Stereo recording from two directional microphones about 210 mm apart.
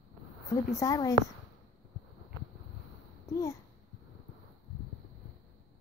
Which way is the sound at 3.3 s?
15° left (ahead or behind).